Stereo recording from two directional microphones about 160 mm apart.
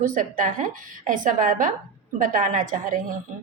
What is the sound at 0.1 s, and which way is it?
A woman's voice, 50° right (ahead or behind).